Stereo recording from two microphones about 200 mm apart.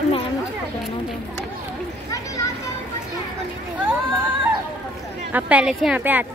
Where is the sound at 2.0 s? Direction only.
15° left (ahead or behind).